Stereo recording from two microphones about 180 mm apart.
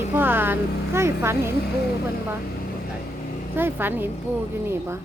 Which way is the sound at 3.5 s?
10° right (ahead or behind).